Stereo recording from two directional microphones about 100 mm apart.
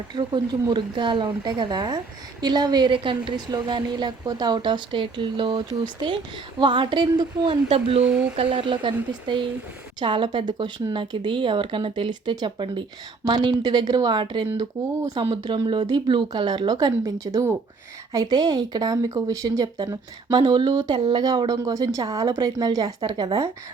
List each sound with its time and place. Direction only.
0.1 s a woman's voice: 50° right (ahead or behind)
7.7 s speech: 70° right (ahead or behind)
8.0 s speech: 10° right (ahead or behind)
8.4 s a woman's voice: 55° right (ahead or behind)